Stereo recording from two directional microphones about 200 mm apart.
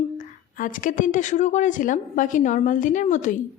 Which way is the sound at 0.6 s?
40° left (ahead or behind).